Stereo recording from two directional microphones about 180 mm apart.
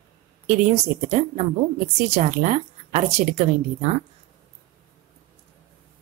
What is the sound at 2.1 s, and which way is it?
A woman's voice, 40° right (ahead or behind).